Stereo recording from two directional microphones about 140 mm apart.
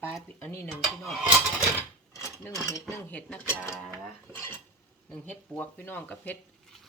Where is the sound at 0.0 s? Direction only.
15° left (ahead or behind).